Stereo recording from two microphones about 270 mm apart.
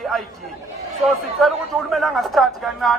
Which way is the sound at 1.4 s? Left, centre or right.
Centre.